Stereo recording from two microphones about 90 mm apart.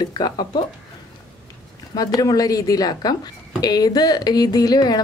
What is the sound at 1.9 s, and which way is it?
A woman's voice, 40° left (ahead or behind).